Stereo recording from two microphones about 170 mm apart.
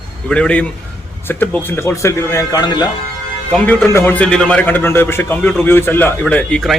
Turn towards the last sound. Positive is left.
turn(degrees=5)  # may be behind; listen again after turning